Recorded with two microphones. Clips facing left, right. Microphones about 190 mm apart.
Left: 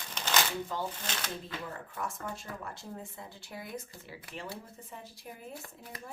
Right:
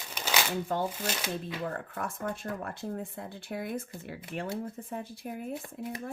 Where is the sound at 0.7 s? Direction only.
60° right (ahead or behind).